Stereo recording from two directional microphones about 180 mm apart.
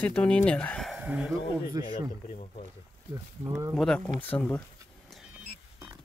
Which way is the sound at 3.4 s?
15° right (ahead or behind).